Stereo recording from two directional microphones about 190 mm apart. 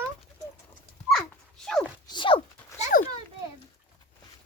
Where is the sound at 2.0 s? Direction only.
25° left (ahead or behind).